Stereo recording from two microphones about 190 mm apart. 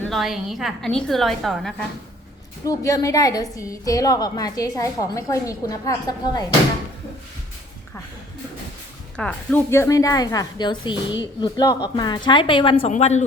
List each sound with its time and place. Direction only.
0.0 s a woman's voice: centre (ahead or behind)
2.6 s a woman's voice: 15° left (ahead or behind)
9.1 s a woman's voice: 5° left (ahead or behind); by 13.2 s 35° left (ahead or behind)